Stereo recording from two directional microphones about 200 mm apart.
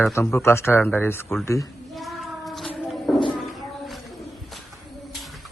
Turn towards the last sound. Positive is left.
turn(degrees=0)  # may be behind; listen again after turning